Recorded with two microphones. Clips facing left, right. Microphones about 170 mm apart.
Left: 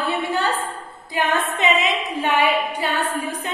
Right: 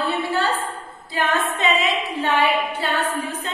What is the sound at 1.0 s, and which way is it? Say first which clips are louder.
A capella: left 1 dB; 20° left (ahead or behind).